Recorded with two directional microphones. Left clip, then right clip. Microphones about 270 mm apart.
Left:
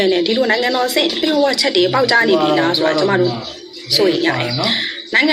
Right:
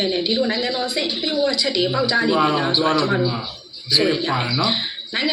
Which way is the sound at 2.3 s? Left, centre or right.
Left.